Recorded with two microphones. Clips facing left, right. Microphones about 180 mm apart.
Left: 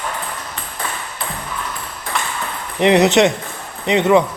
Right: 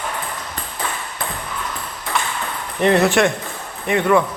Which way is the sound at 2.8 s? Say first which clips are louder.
Left 3 dB; 20° left (ahead or behind).